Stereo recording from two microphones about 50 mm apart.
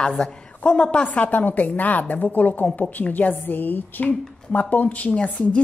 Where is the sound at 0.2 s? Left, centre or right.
Left.